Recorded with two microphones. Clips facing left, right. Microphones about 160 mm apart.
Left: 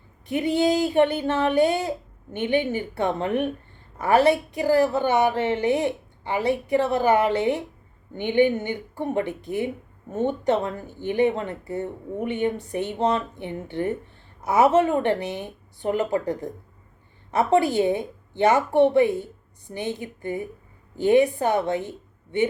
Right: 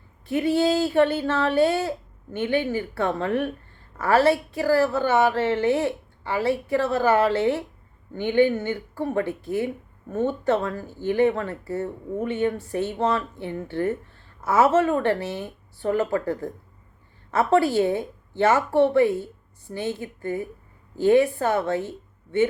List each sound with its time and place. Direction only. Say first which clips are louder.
0.3 s a woman's voice: even; 20° left (ahead or behind)